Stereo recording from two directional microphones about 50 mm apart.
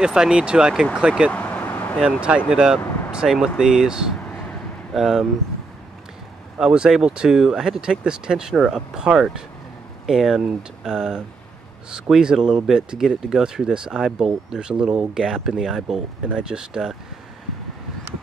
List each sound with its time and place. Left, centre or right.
0.0 s speech: centre
1.3 s vehicle: left
1.7 s vehicle: left
2.2 s speech: right
6.6 s speech: centre